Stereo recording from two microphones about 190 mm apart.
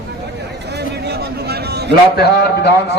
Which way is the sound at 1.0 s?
55° right (ahead or behind).